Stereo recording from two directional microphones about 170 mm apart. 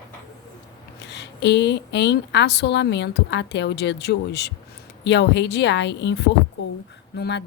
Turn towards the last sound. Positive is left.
turn(degrees=85)